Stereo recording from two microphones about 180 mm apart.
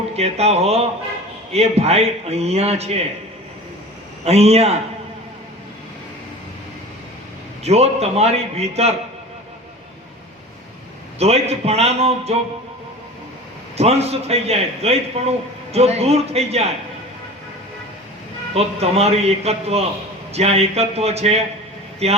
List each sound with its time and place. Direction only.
0.2 s a man's voice: 35° right (ahead or behind)
4.3 s a man's voice: 35° right (ahead or behind)
7.6 s a man's voice: 35° right (ahead or behind)
11.2 s a man's voice: 35° right (ahead or behind)
13.7 s a man's voice: 35° right (ahead or behind)
18.5 s a man's voice: 35° right (ahead or behind)